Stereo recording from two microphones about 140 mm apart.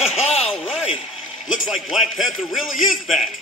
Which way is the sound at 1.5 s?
Centre (ahead or behind).